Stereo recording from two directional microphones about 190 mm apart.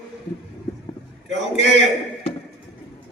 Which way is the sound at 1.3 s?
70° right (ahead or behind).